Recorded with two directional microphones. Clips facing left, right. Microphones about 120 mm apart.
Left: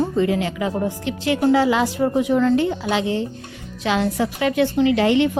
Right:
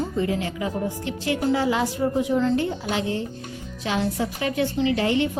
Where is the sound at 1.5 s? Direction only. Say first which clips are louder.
Left 5 dB; 90° left.